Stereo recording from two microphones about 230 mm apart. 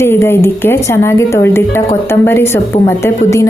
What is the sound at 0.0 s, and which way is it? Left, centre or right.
A woman's voice, centre.